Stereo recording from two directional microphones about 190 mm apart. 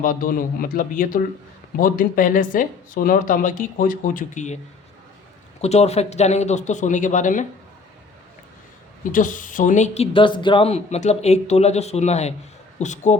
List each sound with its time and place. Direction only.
0.0 s speech: 45° left (ahead or behind)
5.6 s speech: 35° left (ahead or behind)
9.1 s speech: 45° left (ahead or behind)